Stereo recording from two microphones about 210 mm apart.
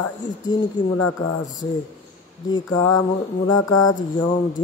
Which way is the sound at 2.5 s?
20° left (ahead or behind).